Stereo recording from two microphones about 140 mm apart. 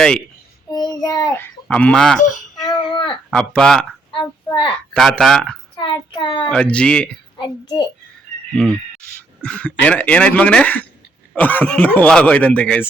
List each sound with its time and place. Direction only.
0.7 s child singing: 30° left (ahead or behind)
1.6 s speech: 5° left (ahead or behind)
2.6 s a sound: 30° left (ahead or behind)
3.3 s speech: 5° left (ahead or behind)
4.9 s speech: centre (ahead or behind)
5.8 s a child's voice: 35° left (ahead or behind)
6.5 s speech: 10° left (ahead or behind)
7.3 s a child's voice: 30° left (ahead or behind)
8.5 s speech: 5° left (ahead or behind)